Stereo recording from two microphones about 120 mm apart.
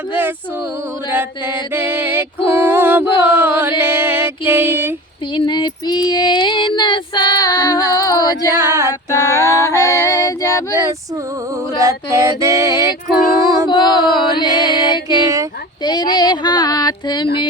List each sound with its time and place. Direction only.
0.1 s music: 15° right (ahead or behind)
1.7 s music: 20° right (ahead or behind)
5.3 s female singing: 40° left (ahead or behind)
8.5 s a sound: 20° right (ahead or behind)
9.0 s a sound: 30° left (ahead or behind)
11.8 s female singing: 25° right (ahead or behind)
13.4 s child singing: 25° right (ahead or behind)
13.7 s female singing: 40° left (ahead or behind)
15.1 s female singing: 30° right (ahead or behind)
15.8 s speech: 35° left (ahead or behind)